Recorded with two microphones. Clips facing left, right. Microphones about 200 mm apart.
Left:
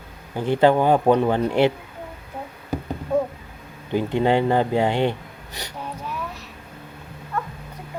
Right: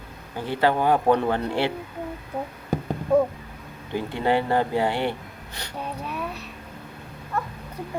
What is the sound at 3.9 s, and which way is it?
Speech, 20° left (ahead or behind).